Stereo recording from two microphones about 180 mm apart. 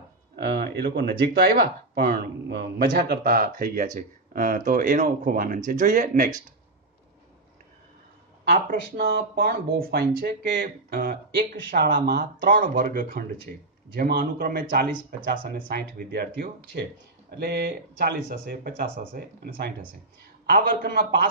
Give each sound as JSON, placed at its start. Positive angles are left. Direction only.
{"t": 0.4, "sound": "speech", "side_deg": -65}
{"t": 8.5, "sound": "speech", "side_deg": -60}
{"t": 17.4, "sound": "speech", "side_deg": -60}